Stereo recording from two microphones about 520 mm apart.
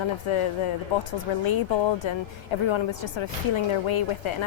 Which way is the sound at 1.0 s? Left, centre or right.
Left.